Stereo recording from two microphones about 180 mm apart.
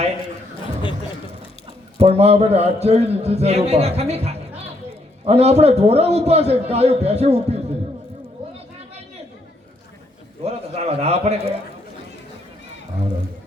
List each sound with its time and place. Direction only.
2.0 s a man's voice: 35° right (ahead or behind)
10.4 s a man's voice: 35° right (ahead or behind)